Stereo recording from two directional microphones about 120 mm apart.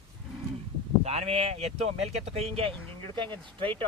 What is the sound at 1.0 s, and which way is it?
Speech, 60° right (ahead or behind).